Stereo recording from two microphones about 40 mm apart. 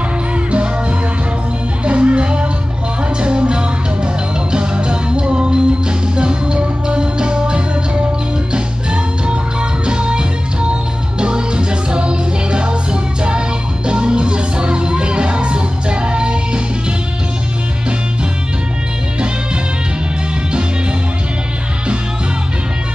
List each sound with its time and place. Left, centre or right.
1.9 s music: right